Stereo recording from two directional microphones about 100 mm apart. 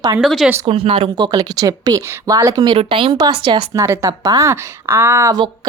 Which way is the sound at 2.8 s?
65° right (ahead or behind).